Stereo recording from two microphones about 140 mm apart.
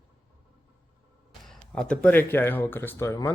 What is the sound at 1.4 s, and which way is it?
Speech, 5° left (ahead or behind).